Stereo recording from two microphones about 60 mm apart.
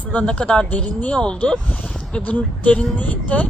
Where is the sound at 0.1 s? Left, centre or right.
Centre.